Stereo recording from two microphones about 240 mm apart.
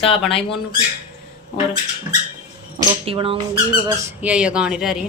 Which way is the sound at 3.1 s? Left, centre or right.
Right.